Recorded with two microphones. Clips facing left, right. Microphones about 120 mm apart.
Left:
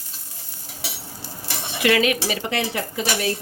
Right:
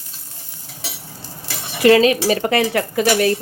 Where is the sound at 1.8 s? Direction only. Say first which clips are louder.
Right 7 dB; 30° right (ahead or behind).